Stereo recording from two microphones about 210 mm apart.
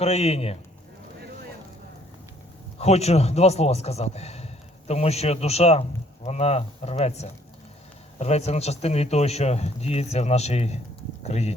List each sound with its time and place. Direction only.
0.0 s speech: 30° left (ahead or behind)
2.7 s speech: 30° left (ahead or behind)